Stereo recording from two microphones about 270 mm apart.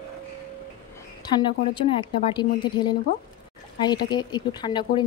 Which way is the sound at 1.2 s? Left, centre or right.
Centre.